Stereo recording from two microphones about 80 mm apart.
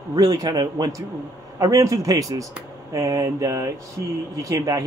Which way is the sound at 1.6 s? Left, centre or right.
Right.